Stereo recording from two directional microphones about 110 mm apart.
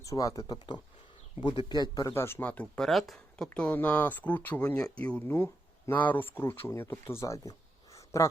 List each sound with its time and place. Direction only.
0.0 s speech: 30° left (ahead or behind)
2.1 s speech: 20° left (ahead or behind)
2.8 s speech: centre (ahead or behind); by 7.5 s 25° left (ahead or behind)
7.9 s a sound: 25° left (ahead or behind)